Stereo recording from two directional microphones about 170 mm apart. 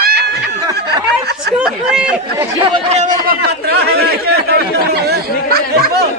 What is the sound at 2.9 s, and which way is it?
Speech, 45° right (ahead or behind).